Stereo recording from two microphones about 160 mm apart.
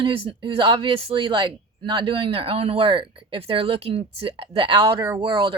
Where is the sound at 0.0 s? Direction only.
35° right (ahead or behind).